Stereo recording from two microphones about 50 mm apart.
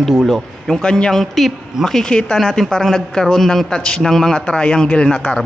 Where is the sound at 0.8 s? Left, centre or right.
Centre.